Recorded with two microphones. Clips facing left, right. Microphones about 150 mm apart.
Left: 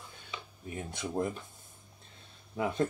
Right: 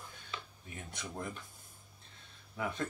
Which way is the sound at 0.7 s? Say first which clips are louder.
Left 9 dB; 30° left (ahead or behind).